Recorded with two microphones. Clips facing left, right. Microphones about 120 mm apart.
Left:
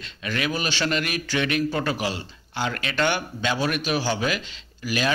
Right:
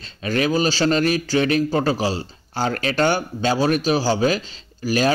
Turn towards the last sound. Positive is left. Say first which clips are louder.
# right 6 dB
turn(degrees=-35)  # may be behind; listen again after turning